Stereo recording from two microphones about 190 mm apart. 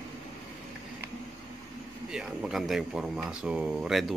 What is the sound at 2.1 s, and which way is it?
Speech, 5° right (ahead or behind).